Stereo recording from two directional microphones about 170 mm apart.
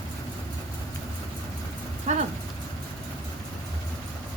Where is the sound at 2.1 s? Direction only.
45° right (ahead or behind).